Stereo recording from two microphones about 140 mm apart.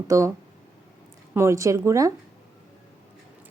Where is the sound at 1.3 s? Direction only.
20° right (ahead or behind).